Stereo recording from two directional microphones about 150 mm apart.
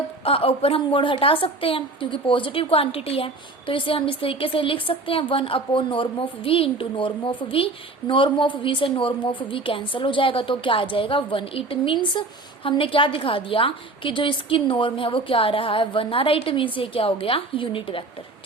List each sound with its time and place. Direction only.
0.3 s a woman's voice: 40° left (ahead or behind)